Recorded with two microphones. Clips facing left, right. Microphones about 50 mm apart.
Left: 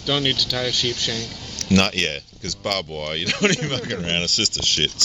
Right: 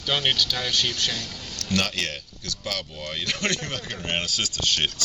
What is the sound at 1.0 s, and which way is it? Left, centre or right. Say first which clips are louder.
Speech: left 2 dB; left.